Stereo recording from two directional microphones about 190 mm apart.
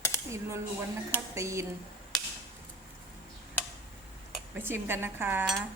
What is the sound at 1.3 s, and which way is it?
Speech, 15° right (ahead or behind).